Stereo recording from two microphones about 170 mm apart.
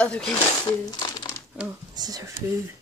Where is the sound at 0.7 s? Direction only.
25° left (ahead or behind).